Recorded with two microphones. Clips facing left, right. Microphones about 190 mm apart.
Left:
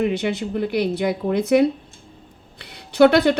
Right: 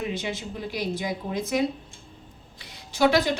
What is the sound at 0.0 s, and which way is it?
A woman's voice, 60° left (ahead or behind).